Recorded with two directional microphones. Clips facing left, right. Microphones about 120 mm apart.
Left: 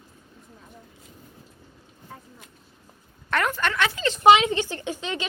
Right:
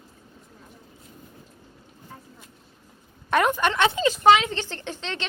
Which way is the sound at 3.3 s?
15° right (ahead or behind).